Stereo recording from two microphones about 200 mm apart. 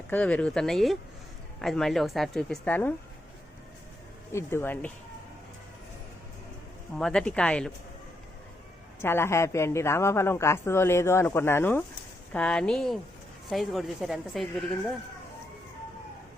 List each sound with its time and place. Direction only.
0.1 s a woman's voice: 5° left (ahead or behind)
4.3 s a woman's voice: 10° left (ahead or behind)
6.9 s a woman's voice: 5° left (ahead or behind)
9.0 s a woman's voice: 10° left (ahead or behind)